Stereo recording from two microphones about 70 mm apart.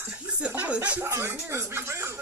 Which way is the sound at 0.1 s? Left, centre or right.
Centre.